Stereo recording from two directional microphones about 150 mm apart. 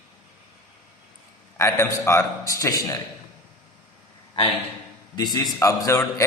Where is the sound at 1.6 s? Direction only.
20° left (ahead or behind).